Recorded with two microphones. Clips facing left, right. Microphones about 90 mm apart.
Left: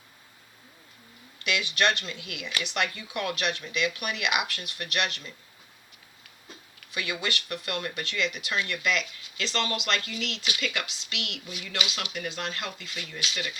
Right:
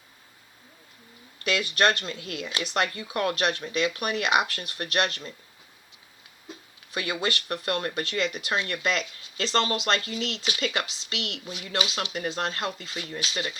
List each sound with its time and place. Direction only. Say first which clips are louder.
1.5 s speech: right 3 dB; 40° right (ahead or behind)
6.7 s speech: right 3 dB; 35° right (ahead or behind)